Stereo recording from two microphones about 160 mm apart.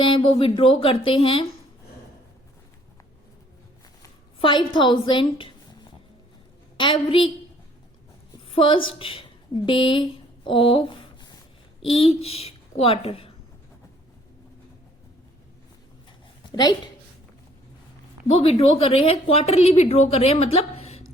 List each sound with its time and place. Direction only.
0.0 s a woman's voice: 35° left (ahead or behind)
4.4 s a woman's voice: 30° left (ahead or behind)
6.7 s a woman's voice: 30° left (ahead or behind)
8.4 s a woman's voice: 35° left (ahead or behind)
16.5 s a woman's voice: 25° left (ahead or behind)
18.3 s a woman's voice: 35° left (ahead or behind)